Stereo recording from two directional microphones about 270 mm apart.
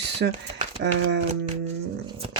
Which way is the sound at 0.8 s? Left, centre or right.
Right.